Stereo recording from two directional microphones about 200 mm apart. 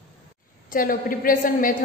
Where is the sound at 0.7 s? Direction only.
45° left (ahead or behind).